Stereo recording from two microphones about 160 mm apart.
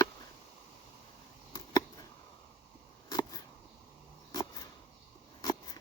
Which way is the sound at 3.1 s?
25° left (ahead or behind).